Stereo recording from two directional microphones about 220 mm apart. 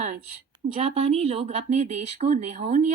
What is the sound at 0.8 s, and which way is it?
Speech, 30° right (ahead or behind).